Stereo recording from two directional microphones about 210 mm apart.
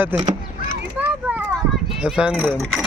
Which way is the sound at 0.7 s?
10° right (ahead or behind).